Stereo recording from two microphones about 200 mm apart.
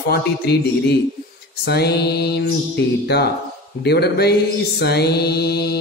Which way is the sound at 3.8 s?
55° left (ahead or behind).